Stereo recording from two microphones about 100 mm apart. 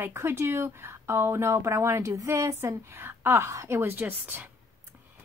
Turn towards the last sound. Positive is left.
turn(degrees=-20)  # may be behind; listen again after turning